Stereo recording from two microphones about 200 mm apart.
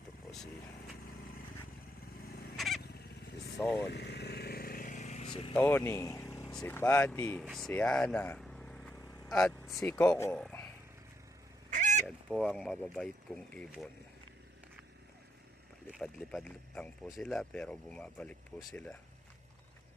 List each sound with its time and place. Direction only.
2.2 s fowl: 50° left (ahead or behind)
2.6 s fowl: centre (ahead or behind)
2.8 s fowl: 55° left (ahead or behind)
3.6 s speech: 5° left (ahead or behind)
3.8 s vehicle: 55° left (ahead or behind); by 5.5 s 30° left (ahead or behind)
5.5 s speech: 10° left (ahead or behind)
11.7 s goose: 35° right (ahead or behind)
12.0 s speech: 5° left (ahead or behind)
15.9 s speech: centre (ahead or behind)